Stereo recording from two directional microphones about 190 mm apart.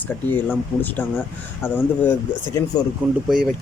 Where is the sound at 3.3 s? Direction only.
5° right (ahead or behind).